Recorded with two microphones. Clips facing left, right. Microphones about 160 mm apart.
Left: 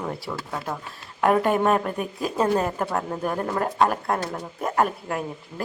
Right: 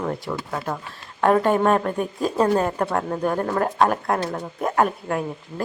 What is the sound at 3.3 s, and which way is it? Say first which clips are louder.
Speech: right 2 dB; 35° right (ahead or behind).